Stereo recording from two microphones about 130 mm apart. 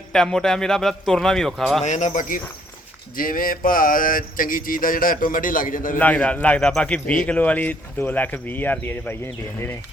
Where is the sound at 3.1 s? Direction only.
90° left.